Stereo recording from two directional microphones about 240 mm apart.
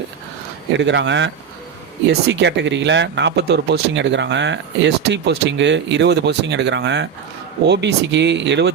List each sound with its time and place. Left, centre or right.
0.7 s speech: right